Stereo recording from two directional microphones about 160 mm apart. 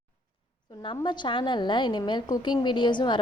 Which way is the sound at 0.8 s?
30° left (ahead or behind).